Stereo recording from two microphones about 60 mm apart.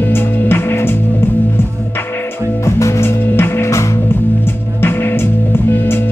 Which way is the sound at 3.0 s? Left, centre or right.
Left.